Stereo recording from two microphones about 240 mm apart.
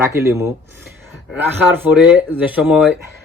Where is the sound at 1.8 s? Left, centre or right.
Centre.